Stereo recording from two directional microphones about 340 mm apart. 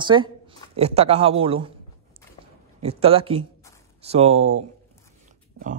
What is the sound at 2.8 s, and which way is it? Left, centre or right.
Speech, centre.